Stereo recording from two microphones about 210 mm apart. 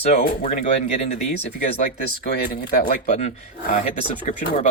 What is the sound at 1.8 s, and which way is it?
Speech, 45° left (ahead or behind).